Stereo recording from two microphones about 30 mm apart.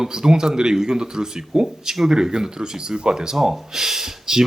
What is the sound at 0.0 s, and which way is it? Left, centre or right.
Speech, right.